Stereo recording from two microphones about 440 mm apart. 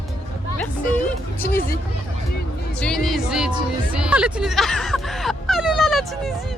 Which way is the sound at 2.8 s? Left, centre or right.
Centre.